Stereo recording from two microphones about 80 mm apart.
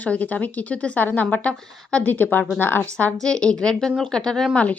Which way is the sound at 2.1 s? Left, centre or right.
Left.